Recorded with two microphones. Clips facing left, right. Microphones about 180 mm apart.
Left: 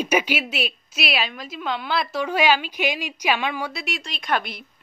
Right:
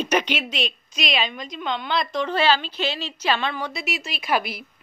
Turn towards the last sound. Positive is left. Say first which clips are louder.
# right 1 dB
turn(degrees=-5)  # may be behind; listen again after turning